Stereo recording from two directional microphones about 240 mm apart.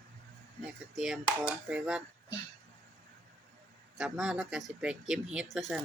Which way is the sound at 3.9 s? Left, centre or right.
Centre.